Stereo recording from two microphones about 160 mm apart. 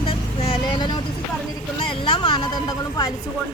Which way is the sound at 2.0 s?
30° left (ahead or behind).